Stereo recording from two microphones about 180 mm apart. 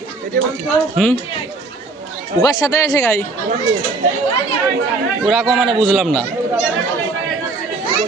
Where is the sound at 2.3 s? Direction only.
20° left (ahead or behind).